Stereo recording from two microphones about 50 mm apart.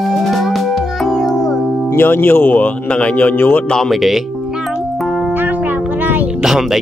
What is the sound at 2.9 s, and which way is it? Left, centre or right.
Speech, left.